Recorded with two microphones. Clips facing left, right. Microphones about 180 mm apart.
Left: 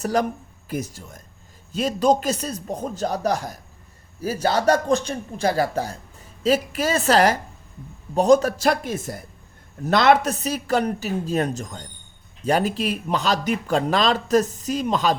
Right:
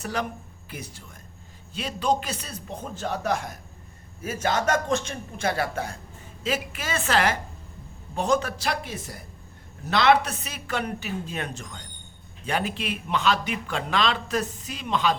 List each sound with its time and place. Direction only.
0.0 s a man's voice: 40° left (ahead or behind)